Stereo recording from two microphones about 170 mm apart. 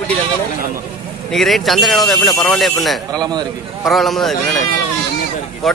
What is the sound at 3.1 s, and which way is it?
Speech, 25° right (ahead or behind).